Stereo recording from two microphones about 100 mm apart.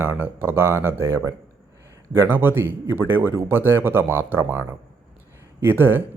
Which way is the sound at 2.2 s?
20° right (ahead or behind).